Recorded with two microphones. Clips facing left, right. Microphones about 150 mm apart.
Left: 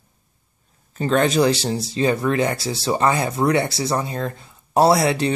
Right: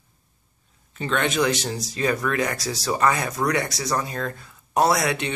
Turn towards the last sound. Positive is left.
turn(degrees=30)  # may be behind; listen again after turning